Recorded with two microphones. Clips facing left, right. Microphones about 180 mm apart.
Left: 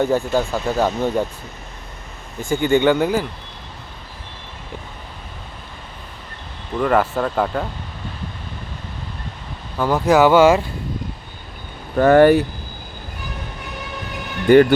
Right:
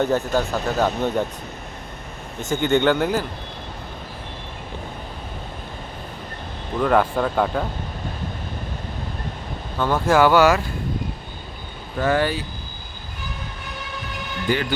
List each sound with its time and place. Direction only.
0.0 s speech: 15° left (ahead or behind)
2.5 s speech: 10° left (ahead or behind)
6.8 s speech: 5° left (ahead or behind)
9.7 s speech: 10° left (ahead or behind)
11.9 s speech: 55° left (ahead or behind)
14.4 s speech: 55° left (ahead or behind)